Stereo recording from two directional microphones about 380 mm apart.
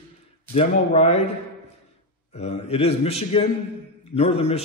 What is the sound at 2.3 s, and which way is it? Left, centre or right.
A man's voice, centre.